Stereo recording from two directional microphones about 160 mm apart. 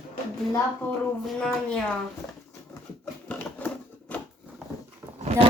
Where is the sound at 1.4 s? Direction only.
5° left (ahead or behind).